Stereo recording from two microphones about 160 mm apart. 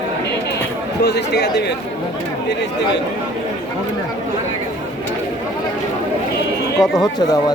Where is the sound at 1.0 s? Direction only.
90° left.